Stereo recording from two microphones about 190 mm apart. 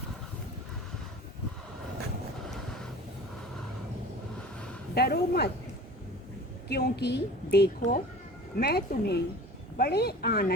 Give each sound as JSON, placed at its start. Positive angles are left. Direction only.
{"t": 4.9, "sound": "a woman's voice", "side_deg": 55}
{"t": 6.7, "sound": "a woman's voice", "side_deg": 55}
{"t": 7.8, "sound": "speech", "side_deg": 45}
{"t": 8.5, "sound": "a woman's voice", "side_deg": 55}